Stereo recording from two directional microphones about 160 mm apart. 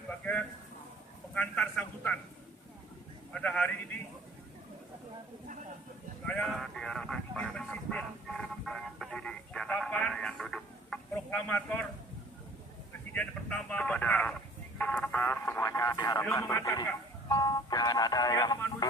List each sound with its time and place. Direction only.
1.3 s speech: 10° left (ahead or behind)
3.3 s speech: 5° left (ahead or behind)
6.2 s speech: centre (ahead or behind)
13.1 s speech: 5° left (ahead or behind); by 18.5 s 25° left (ahead or behind)